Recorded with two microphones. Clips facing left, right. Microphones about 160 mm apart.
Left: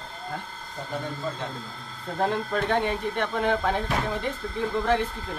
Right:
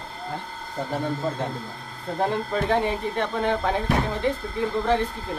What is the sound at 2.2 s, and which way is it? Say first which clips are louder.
Speech: right 1 dB; 5° right (ahead or behind).